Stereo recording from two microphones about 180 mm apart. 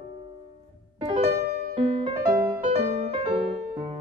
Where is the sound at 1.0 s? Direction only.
30° right (ahead or behind).